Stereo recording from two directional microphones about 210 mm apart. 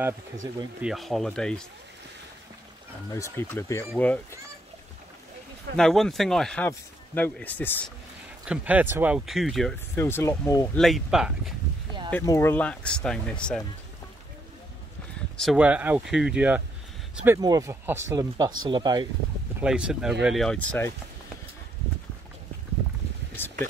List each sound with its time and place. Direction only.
0.0 s speech: 15° right (ahead or behind)
0.8 s speech: centre (ahead or behind)
3.1 s speech: 15° left (ahead or behind)
5.8 s speech: centre (ahead or behind)
8.5 s speech: 5° right (ahead or behind)
9.9 s speech: 10° left (ahead or behind)
10.8 s speech: centre (ahead or behind)
12.1 s speech: 10° left (ahead or behind)
15.3 s speech: centre (ahead or behind); by 19.0 s 20° right (ahead or behind)
19.6 s speech: 5° right (ahead or behind)